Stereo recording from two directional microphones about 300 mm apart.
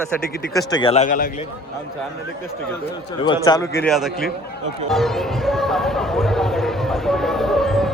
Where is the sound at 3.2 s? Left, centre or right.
Centre.